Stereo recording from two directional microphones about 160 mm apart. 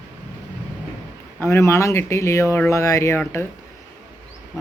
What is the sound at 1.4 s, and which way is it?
Speech, 15° left (ahead or behind).